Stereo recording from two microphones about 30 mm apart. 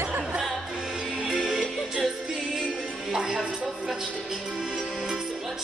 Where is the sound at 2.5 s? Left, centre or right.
Right.